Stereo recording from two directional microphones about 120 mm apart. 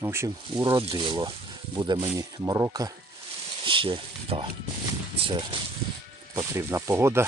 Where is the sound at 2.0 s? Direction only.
30° right (ahead or behind).